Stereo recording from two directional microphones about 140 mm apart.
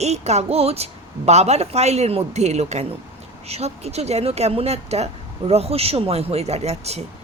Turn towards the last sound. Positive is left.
turn(degrees=-50)  # may be behind; listen again after turning